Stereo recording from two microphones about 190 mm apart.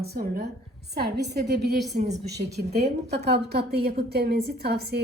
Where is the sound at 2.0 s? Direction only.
35° right (ahead or behind).